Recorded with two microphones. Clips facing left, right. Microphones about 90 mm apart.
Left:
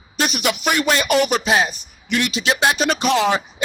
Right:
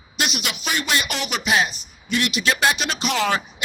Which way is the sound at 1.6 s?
45° left (ahead or behind).